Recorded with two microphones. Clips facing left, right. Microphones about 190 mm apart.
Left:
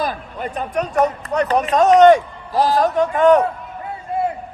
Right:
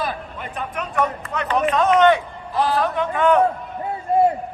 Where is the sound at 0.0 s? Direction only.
40° left (ahead or behind).